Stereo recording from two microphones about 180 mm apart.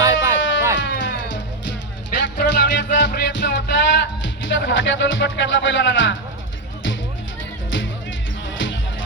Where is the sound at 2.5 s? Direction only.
75° left (ahead or behind).